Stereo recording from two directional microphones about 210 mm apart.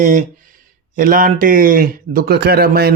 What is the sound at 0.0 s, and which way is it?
Speech, 35° right (ahead or behind).